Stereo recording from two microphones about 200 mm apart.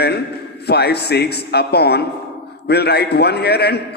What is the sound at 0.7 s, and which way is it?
A man's voice, 55° left (ahead or behind).